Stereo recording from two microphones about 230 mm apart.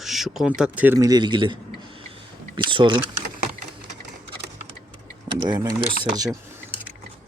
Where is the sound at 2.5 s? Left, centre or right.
Right.